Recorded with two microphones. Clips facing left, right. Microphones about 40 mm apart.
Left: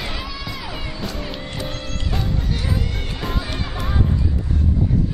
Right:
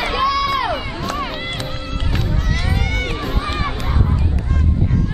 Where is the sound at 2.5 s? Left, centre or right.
Right.